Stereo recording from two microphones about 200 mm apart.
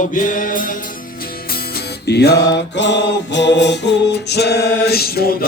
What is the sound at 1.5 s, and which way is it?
Music, 55° left (ahead or behind).